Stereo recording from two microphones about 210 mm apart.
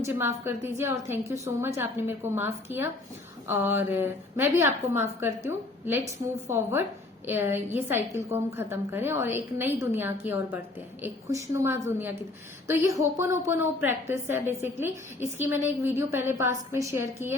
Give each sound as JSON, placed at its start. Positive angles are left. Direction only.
{"t": 0.0, "sound": "a woman's voice", "side_deg": -10}